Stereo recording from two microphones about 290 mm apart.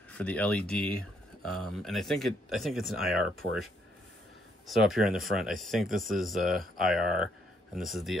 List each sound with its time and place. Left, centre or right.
0.1 s speech: centre